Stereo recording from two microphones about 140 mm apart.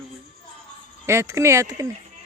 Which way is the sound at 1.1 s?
20° right (ahead or behind).